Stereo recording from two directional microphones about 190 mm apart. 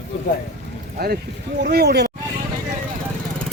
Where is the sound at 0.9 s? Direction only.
55° right (ahead or behind).